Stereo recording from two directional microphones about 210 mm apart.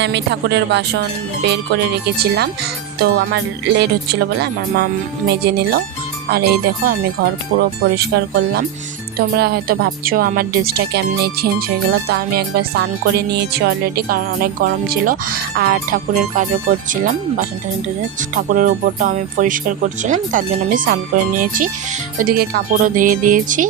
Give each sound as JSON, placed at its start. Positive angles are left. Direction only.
{"t": 0.0, "sound": "speech", "side_deg": -55}